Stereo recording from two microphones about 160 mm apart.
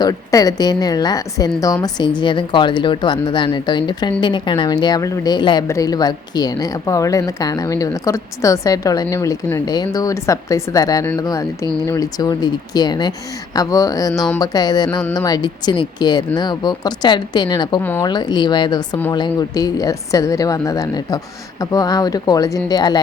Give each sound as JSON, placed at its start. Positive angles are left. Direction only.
{"t": 0.0, "sound": "speech", "side_deg": 25}